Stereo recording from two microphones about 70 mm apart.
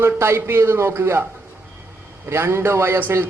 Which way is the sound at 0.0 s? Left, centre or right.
Right.